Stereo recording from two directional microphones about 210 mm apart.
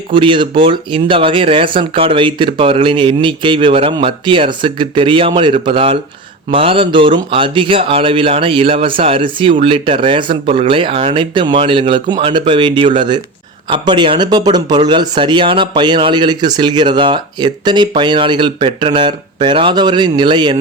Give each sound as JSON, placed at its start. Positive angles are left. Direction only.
{"t": 0.1, "sound": "a man's voice", "side_deg": -25}